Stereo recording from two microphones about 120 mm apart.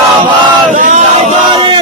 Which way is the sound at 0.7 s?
90° right.